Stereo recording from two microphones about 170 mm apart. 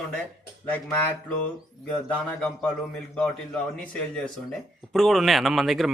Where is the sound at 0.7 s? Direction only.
10° left (ahead or behind).